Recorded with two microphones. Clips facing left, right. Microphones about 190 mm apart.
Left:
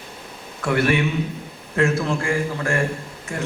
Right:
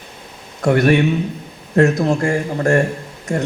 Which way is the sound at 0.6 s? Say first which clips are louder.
Right 6 dB; 40° right (ahead or behind).